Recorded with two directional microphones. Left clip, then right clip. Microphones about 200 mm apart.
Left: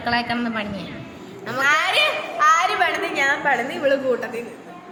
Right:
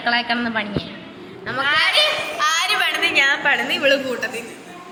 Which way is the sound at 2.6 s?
35° left (ahead or behind).